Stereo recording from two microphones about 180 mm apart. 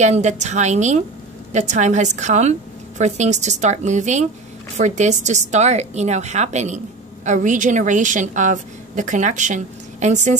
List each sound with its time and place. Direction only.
0.0 s a woman's voice: 40° right (ahead or behind)